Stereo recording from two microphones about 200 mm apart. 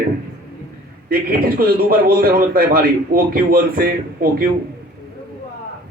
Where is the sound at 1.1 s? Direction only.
45° right (ahead or behind).